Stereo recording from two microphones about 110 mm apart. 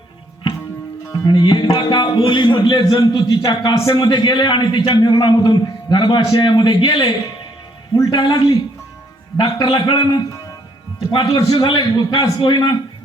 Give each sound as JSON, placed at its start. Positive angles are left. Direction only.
{"t": 1.1, "sound": "a man's voice", "side_deg": 35}
{"t": 7.9, "sound": "a man's voice", "side_deg": 40}
{"t": 11.1, "sound": "a man's voice", "side_deg": 45}